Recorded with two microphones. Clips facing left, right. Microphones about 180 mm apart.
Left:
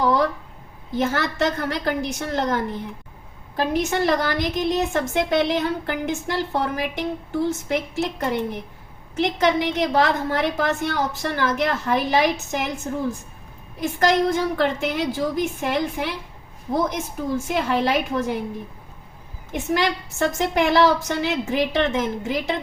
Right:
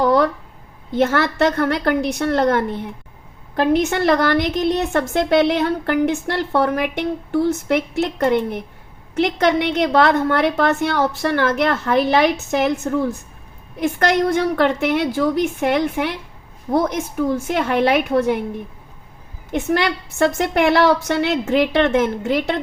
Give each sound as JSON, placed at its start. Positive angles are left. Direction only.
{"t": 0.9, "sound": "a woman's voice", "side_deg": -65}
{"t": 17.2, "sound": "a woman's voice", "side_deg": -65}
{"t": 19.7, "sound": "a woman's voice", "side_deg": -65}